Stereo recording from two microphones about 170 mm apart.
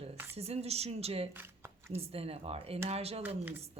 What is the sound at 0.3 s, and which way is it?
Speech, 40° right (ahead or behind).